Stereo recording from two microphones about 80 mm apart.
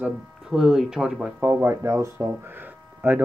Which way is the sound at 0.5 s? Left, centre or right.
Centre.